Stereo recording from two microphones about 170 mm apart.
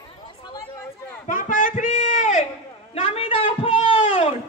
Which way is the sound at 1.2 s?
50° left (ahead or behind).